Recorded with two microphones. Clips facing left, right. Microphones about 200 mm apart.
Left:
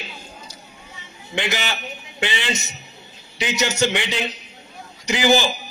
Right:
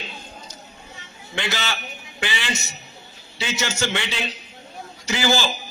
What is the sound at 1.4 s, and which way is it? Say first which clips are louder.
A man's voice: left 2 dB; 15° left (ahead or behind).